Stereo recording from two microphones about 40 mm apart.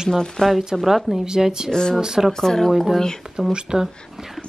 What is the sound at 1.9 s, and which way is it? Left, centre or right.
Speech, centre.